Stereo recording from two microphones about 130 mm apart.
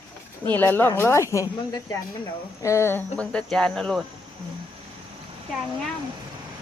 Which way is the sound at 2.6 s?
20° left (ahead or behind).